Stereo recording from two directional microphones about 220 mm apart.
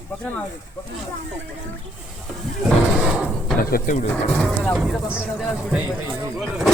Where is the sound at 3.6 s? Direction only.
40° left (ahead or behind).